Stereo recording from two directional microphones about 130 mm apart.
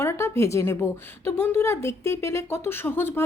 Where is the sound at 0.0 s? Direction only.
20° left (ahead or behind).